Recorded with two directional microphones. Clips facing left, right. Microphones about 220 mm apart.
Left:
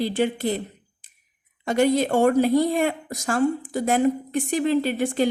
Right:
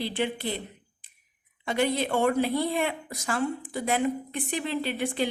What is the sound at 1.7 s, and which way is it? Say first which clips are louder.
A woman's voice: left 6 dB; 45° left (ahead or behind).